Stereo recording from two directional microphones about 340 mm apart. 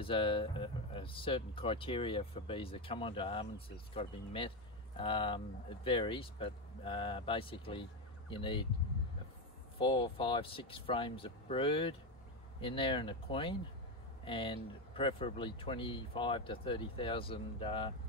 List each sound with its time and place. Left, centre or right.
0.0 s speech: centre
9.8 s speech: centre